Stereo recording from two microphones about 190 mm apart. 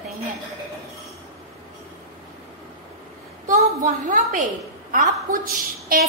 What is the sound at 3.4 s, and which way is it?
A woman's voice, 45° right (ahead or behind).